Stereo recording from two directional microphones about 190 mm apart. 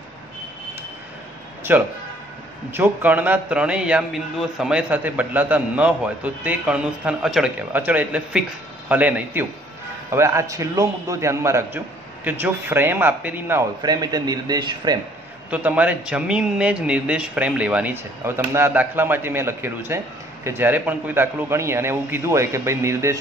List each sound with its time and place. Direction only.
1.7 s a man's voice: 10° right (ahead or behind)
15.5 s a man's voice: 5° right (ahead or behind)